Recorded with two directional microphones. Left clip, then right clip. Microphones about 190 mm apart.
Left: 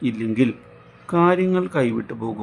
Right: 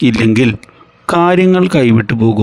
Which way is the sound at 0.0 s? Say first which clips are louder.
Right 11 dB; 55° right (ahead or behind).